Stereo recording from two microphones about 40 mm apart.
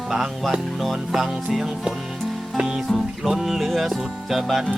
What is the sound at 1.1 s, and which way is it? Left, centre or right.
Music, centre.